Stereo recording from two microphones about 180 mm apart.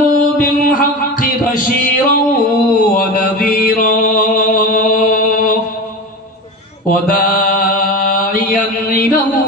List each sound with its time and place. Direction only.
0.1 s music: 50° left (ahead or behind)
2.8 s mantra: 50° left (ahead or behind)
6.9 s mantra: 50° left (ahead or behind)